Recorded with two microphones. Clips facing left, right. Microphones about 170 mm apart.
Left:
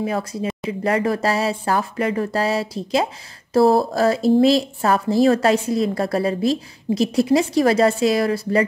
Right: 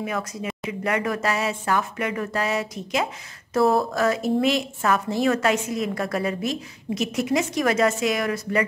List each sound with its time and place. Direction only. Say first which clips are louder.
0.0 s a woman's voice: left 5 dB; 30° left (ahead or behind)